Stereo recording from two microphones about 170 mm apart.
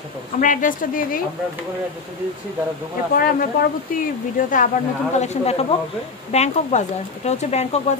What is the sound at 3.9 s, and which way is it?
Speech, 55° left (ahead or behind).